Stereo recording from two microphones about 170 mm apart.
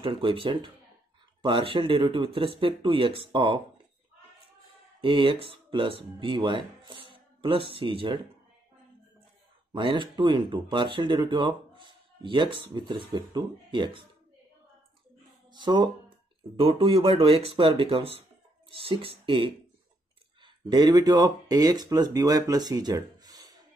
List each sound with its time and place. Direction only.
0.0 s speech: 30° right (ahead or behind)
5.0 s speech: 30° right (ahead or behind)
9.7 s speech: 30° right (ahead or behind)
15.5 s speech: 25° right (ahead or behind)